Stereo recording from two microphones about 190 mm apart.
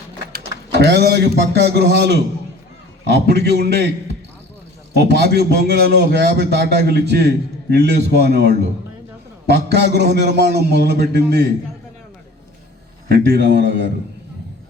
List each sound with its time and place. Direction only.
0.3 s a man's voice: 60° right (ahead or behind)
13.1 s a man's voice: 55° right (ahead or behind)